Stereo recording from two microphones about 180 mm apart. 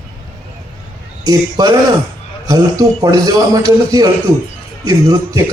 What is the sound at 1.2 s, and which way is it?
A man's voice, 20° right (ahead or behind).